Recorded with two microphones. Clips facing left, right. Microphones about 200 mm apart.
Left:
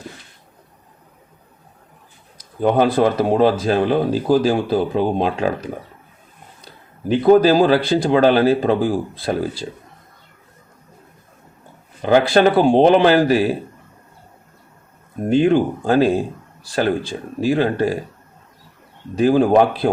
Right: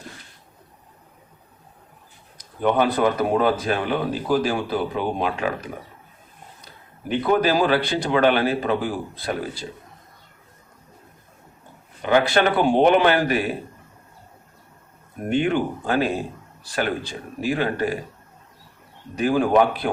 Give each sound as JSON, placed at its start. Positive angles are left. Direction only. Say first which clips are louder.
{"t": 2.6, "sound": "speech", "louder": "left 4 dB", "side_deg": 35}
{"t": 7.1, "sound": "speech", "louder": "left 8 dB", "side_deg": 35}
{"t": 12.0, "sound": "speech", "louder": "left 5 dB", "side_deg": 35}
{"t": 15.4, "sound": "speech", "louder": "left 7 dB", "side_deg": 35}
{"t": 19.1, "sound": "speech", "louder": "left 5 dB", "side_deg": 30}